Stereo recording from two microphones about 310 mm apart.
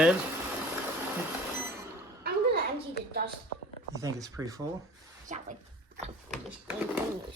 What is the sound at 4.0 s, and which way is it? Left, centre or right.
Speech, centre.